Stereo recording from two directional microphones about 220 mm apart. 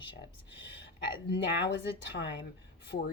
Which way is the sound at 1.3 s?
50° left (ahead or behind).